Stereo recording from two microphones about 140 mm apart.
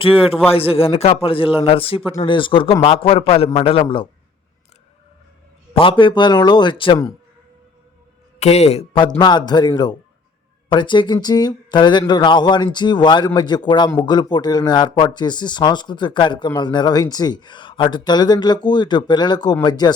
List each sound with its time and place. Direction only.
0.0 s a man's voice: 40° left (ahead or behind)
5.7 s speech: 40° left (ahead or behind)
8.4 s speech: 50° left (ahead or behind); by 19.9 s 30° left (ahead or behind)